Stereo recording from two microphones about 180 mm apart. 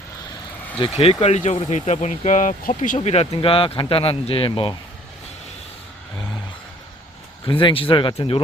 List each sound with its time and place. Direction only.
0.9 s speech: 35° left (ahead or behind)
7.4 s speech: 30° left (ahead or behind)